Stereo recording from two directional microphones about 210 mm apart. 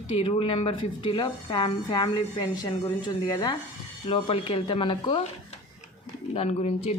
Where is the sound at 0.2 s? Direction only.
25° left (ahead or behind).